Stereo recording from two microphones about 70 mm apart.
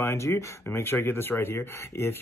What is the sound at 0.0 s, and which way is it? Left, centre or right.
Speech, left.